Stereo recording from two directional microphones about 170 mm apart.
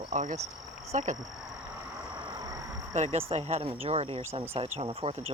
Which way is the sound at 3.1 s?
35° right (ahead or behind).